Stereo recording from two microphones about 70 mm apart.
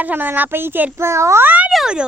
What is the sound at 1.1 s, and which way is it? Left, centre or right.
Speech, right.